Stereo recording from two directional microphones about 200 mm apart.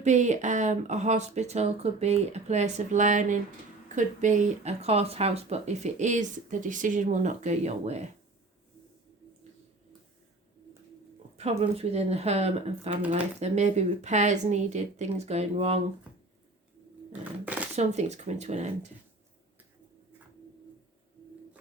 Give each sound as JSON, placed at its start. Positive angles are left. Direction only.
{"t": 0.0, "sound": "speech", "side_deg": -35}
{"t": 11.3, "sound": "speech", "side_deg": -30}
{"t": 17.1, "sound": "a sound", "side_deg": -5}
{"t": 17.7, "sound": "speech", "side_deg": -35}